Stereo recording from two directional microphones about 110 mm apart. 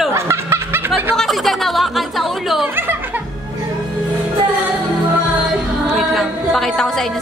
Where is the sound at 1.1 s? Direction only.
Centre (ahead or behind).